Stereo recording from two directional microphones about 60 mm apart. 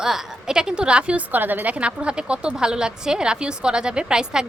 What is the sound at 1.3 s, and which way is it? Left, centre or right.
Speech, right.